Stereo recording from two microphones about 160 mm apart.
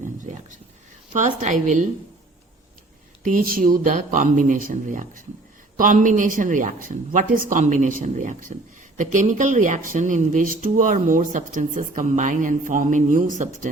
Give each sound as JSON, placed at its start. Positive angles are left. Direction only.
{"t": 1.1, "sound": "speech", "side_deg": -50}
{"t": 3.2, "sound": "speech", "side_deg": -60}